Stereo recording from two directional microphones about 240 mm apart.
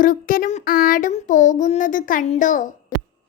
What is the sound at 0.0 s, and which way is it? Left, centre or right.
A child's voice, left.